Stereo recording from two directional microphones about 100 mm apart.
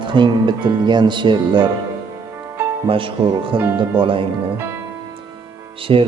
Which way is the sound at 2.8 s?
65° right (ahead or behind).